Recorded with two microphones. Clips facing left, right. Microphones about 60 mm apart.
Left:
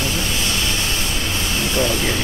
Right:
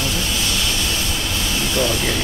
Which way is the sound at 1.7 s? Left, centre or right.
Left.